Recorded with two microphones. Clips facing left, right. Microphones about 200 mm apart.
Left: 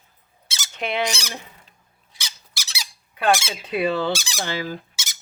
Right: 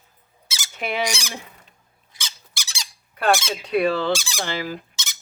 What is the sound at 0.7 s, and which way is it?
Speech, 5° right (ahead or behind).